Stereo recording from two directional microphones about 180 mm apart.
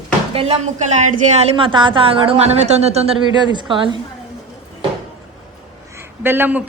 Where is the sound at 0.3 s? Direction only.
40° right (ahead or behind).